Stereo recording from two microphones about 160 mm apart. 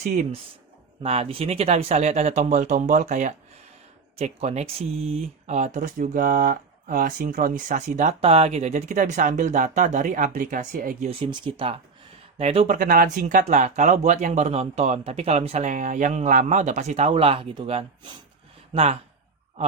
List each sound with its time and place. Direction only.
0.0 s speech: 50° right (ahead or behind)
1.0 s speech: 40° right (ahead or behind); by 11.1 s 55° right (ahead or behind)
11.1 s speech: 30° right (ahead or behind)